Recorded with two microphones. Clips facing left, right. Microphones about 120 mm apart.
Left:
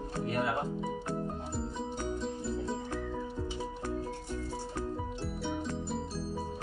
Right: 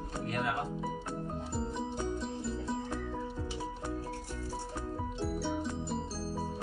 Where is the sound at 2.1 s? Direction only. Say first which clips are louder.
Left 2 dB; centre (ahead or behind).